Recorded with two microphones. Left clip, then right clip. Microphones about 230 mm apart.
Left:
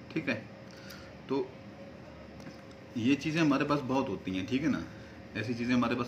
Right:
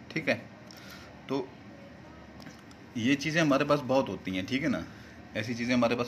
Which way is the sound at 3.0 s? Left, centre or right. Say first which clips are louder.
Right 2 dB; right.